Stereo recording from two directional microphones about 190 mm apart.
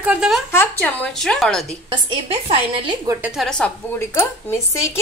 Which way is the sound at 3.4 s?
5° left (ahead or behind).